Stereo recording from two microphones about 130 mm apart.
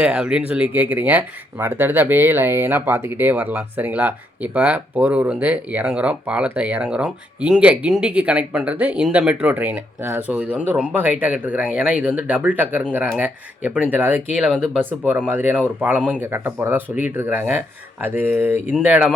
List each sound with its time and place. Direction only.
0.0 s speech: 5° right (ahead or behind)